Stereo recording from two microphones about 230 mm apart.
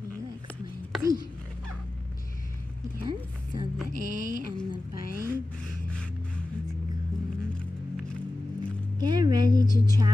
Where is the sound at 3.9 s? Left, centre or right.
Right.